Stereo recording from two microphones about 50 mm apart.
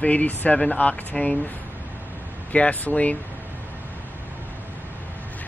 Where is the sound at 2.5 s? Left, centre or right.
Left.